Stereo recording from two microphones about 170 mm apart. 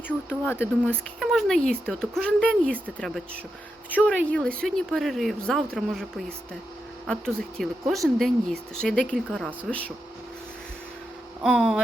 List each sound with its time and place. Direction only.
0.1 s speech: 10° left (ahead or behind)
3.8 s speech: 10° right (ahead or behind)
4.3 s speech: 5° left (ahead or behind)
11.4 s speech: centre (ahead or behind)